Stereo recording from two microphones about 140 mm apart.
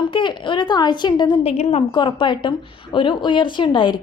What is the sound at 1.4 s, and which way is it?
Speech, 45° left (ahead or behind).